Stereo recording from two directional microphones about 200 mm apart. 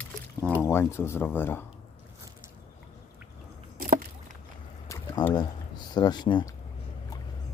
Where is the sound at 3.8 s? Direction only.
45° right (ahead or behind).